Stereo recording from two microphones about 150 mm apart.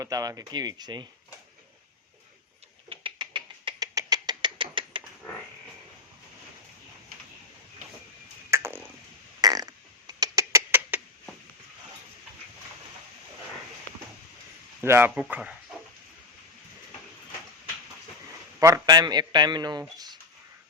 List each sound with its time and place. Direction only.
0.0 s a man's voice: 25° right (ahead or behind)
2.9 s rodents: 35° right (ahead or behind)
8.4 s chop: 15° right (ahead or behind)
9.4 s a sound: 25° right (ahead or behind)
14.8 s speech: 15° right (ahead or behind)
18.6 s a man's voice: 25° right (ahead or behind)